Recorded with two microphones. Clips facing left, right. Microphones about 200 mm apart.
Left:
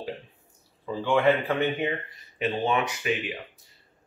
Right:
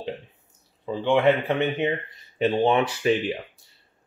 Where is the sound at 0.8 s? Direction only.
20° right (ahead or behind).